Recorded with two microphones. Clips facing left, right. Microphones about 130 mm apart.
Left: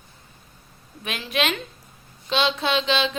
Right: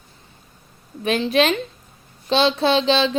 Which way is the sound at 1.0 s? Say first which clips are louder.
Right 8 dB; 35° right (ahead or behind).